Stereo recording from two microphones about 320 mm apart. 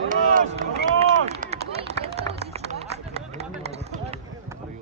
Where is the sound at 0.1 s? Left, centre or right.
Right.